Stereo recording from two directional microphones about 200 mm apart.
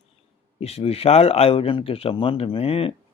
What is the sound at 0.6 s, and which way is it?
Speech, 30° left (ahead or behind).